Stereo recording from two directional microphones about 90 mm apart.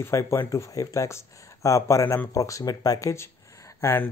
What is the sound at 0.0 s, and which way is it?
Speech, 30° left (ahead or behind).